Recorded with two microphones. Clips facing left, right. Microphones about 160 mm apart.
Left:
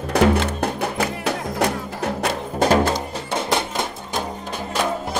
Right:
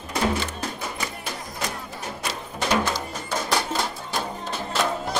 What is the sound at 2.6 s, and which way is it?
Music, 45° left (ahead or behind).